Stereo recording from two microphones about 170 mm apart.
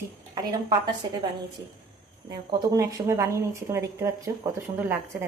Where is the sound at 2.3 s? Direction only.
20° right (ahead or behind).